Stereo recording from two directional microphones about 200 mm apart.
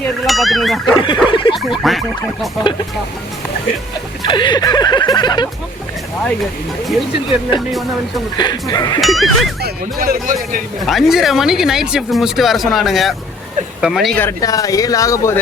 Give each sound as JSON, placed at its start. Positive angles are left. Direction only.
{"t": 0.0, "sound": "speech", "side_deg": 0}
{"t": 0.9, "sound": "a sound", "side_deg": 25}
{"t": 1.3, "sound": "speech", "side_deg": 25}
{"t": 1.8, "sound": "speech", "side_deg": 0}
{"t": 4.2, "sound": "a sound", "side_deg": 25}
{"t": 8.4, "sound": "a sound", "side_deg": 20}
{"t": 9.0, "sound": "speech", "side_deg": 0}
{"t": 9.6, "sound": "speech", "side_deg": -50}
{"t": 10.8, "sound": "speech", "side_deg": 0}
{"t": 14.3, "sound": "speech", "side_deg": 15}